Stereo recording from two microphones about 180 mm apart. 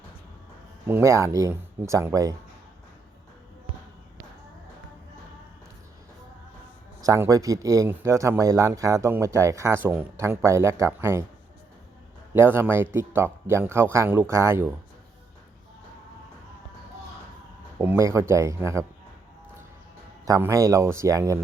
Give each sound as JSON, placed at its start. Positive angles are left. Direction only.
{"t": 0.9, "sound": "speech", "side_deg": -15}
{"t": 7.0, "sound": "speech", "side_deg": -20}
{"t": 12.3, "sound": "speech", "side_deg": -15}
{"t": 17.7, "sound": "speech", "side_deg": -15}
{"t": 20.2, "sound": "speech", "side_deg": -20}